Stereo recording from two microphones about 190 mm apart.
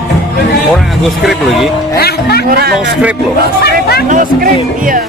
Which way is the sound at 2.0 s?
55° left (ahead or behind).